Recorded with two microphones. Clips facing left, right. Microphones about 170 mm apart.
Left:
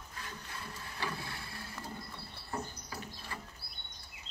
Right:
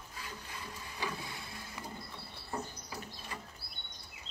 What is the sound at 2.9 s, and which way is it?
Bird, 20° right (ahead or behind).